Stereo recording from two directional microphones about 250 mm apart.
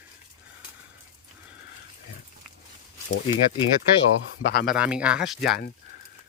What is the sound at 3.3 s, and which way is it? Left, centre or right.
Speech, centre.